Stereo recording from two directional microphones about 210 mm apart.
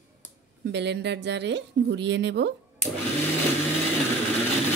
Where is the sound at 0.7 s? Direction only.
55° right (ahead or behind).